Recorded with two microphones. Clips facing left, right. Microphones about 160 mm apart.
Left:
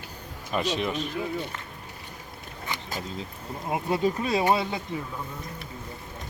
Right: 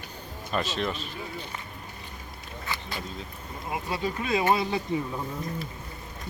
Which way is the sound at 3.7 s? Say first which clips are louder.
Left 5 dB; 50° left (ahead or behind).